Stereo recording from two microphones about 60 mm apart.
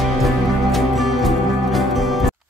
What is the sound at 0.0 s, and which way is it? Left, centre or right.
Music, centre.